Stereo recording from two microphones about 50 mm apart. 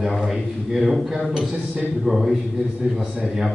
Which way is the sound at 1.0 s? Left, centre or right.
Centre.